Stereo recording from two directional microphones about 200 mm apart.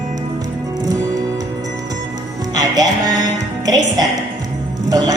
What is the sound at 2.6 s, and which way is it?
Music, 20° right (ahead or behind).